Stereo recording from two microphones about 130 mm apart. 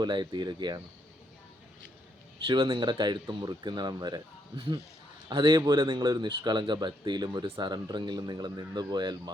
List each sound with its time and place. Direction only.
0.0 s speech: 35° right (ahead or behind)
2.5 s speech: 40° right (ahead or behind)